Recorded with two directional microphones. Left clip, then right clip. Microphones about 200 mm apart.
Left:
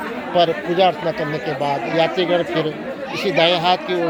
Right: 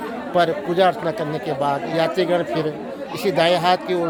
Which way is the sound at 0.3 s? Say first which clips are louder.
Left 2 dB; 15° right (ahead or behind).